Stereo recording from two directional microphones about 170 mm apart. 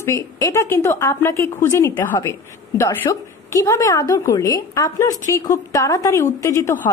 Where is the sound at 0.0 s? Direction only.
20° left (ahead or behind).